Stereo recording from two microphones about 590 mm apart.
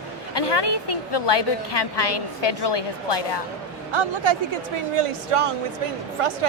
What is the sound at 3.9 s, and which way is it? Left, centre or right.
Speech, right.